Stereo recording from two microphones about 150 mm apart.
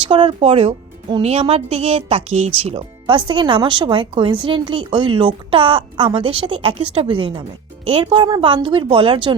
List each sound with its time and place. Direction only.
0.0 s a woman's voice: 35° right (ahead or behind)